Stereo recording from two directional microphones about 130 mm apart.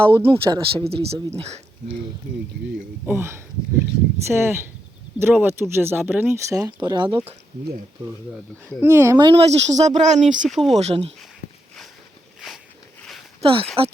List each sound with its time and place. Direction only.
0.2 s speech: 45° right (ahead or behind)
3.1 s speech: 20° right (ahead or behind)
6.8 s speech: 35° right (ahead or behind)
8.8 s speech: 20° right (ahead or behind)
9.1 s speech: 45° right (ahead or behind); by 10.5 s 75° right (ahead or behind)
10.5 s speech: centre (ahead or behind)
10.8 s speech: 55° right (ahead or behind)
13.4 s speech: 45° right (ahead or behind)